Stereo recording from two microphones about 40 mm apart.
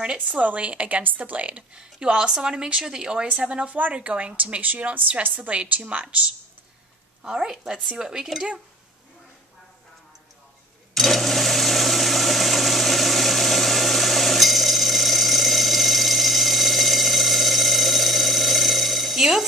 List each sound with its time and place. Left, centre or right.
0.0 s speech: right
0.4 s a woman's voice: right
1.8 s speech: right
3.9 s a woman's voice: right
7.4 s speech: centre
11.0 s engine: centre